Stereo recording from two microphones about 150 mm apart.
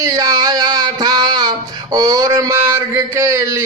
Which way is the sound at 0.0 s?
20° right (ahead or behind).